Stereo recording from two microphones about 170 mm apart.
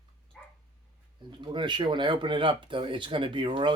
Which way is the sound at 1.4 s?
30° right (ahead or behind).